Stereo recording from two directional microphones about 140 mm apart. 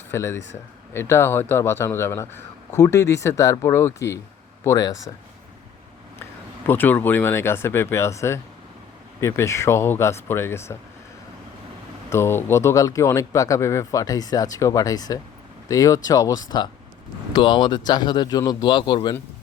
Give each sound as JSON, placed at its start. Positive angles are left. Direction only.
{"t": 0.1, "sound": "a man's voice", "side_deg": 20}
{"t": 6.7, "sound": "a man's voice", "side_deg": 15}
{"t": 12.1, "sound": "a man's voice", "side_deg": 15}